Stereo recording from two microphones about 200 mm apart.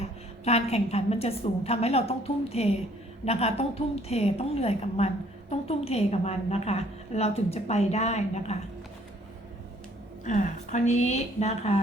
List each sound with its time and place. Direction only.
0.4 s a woman's voice: 30° left (ahead or behind)
10.2 s a woman's voice: 40° left (ahead or behind)